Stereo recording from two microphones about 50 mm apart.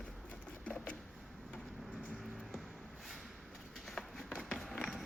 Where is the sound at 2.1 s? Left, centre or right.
Centre.